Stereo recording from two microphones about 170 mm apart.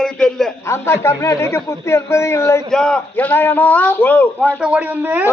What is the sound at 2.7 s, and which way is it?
A man's voice, 5° left (ahead or behind).